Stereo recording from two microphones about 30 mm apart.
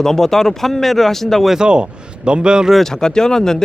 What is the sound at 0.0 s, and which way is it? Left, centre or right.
Speech, centre.